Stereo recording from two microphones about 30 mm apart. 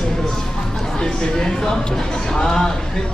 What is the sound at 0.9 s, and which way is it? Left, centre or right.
Speech, left.